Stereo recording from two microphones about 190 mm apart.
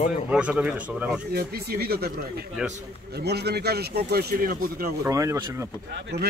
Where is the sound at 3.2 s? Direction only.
60° right (ahead or behind).